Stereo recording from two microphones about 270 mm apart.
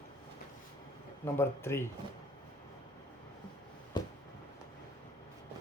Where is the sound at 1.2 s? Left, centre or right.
Centre.